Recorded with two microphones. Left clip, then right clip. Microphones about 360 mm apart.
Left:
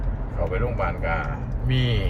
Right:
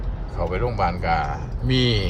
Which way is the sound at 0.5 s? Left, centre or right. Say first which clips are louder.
Right 5 dB; centre.